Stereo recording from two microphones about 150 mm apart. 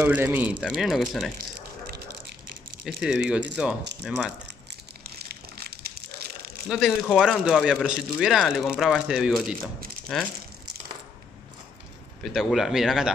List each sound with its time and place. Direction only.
0.0 s speech: 15° right (ahead or behind)
0.8 s speech: centre (ahead or behind)
3.0 s speech: 5° right (ahead or behind)
5.0 s crumpling: 90° right
6.7 s speech: centre (ahead or behind)
12.2 s speech: centre (ahead or behind)